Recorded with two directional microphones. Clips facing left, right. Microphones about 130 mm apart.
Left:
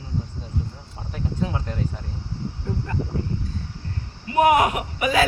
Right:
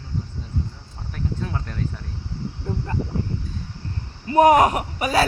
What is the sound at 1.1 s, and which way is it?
Cricket, 5° left (ahead or behind).